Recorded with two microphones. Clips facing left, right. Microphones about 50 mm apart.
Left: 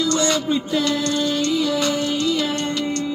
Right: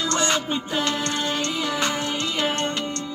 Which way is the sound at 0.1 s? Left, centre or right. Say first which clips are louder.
Left 3 dB; right.